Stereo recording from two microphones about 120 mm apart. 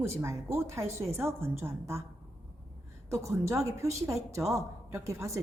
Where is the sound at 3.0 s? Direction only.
25° right (ahead or behind).